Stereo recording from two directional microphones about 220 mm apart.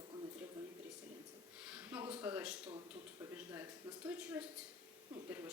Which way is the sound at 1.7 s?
5° right (ahead or behind).